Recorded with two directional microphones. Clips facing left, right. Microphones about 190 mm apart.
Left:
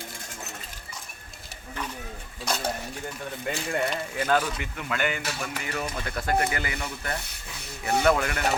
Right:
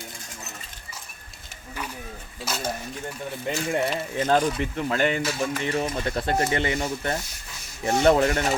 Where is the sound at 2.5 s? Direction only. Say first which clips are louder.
Left 2 dB; 5° right (ahead or behind).